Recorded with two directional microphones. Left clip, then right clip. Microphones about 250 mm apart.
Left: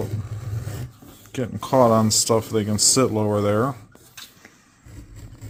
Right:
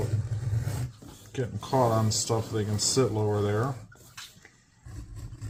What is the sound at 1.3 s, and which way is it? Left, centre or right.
Speech, left.